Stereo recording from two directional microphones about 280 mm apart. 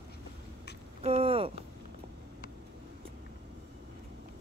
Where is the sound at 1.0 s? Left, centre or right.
Right.